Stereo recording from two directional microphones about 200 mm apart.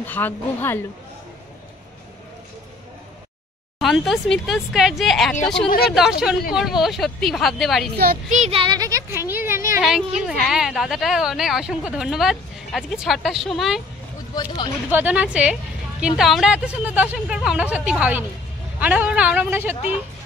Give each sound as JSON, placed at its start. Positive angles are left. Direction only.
{"t": 0.0, "sound": "speech", "side_deg": 10}
{"t": 3.8, "sound": "a woman's voice", "side_deg": 0}
{"t": 8.0, "sound": "a sound", "side_deg": -45}
{"t": 9.8, "sound": "a woman's voice", "side_deg": 0}
{"t": 14.3, "sound": "speech", "side_deg": 20}
{"t": 14.9, "sound": "a woman's voice", "side_deg": -10}